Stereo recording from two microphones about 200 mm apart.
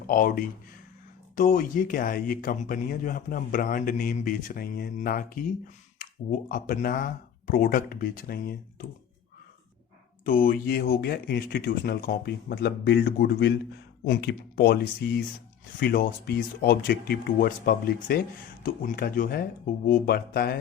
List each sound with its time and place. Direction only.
0.1 s speech: 45° left (ahead or behind)
6.5 s speech: 45° left (ahead or behind)
10.2 s speech: 45° left (ahead or behind)